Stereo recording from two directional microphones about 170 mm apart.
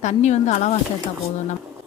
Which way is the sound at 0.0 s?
45° left (ahead or behind).